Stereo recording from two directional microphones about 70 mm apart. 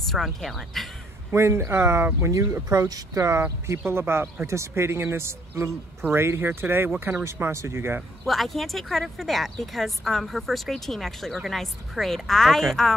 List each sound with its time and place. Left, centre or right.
0.0 s speech: centre
1.3 s speech: right
2.7 s speech: right
4.5 s speech: right
7.2 s speech: right
8.3 s speech: centre